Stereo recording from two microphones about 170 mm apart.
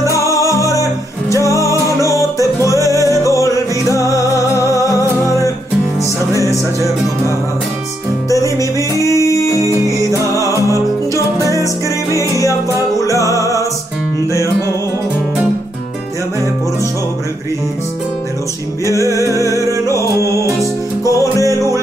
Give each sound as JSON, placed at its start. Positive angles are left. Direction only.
{"t": 0.0, "sound": "music", "side_deg": 20}
{"t": 6.3, "sound": "music", "side_deg": 20}
{"t": 8.5, "sound": "music", "side_deg": 20}
{"t": 9.6, "sound": "music", "side_deg": -20}
{"t": 10.3, "sound": "music", "side_deg": 20}
{"t": 19.6, "sound": "music", "side_deg": 15}